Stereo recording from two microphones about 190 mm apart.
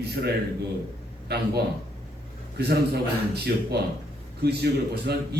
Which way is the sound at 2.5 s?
60° right (ahead or behind).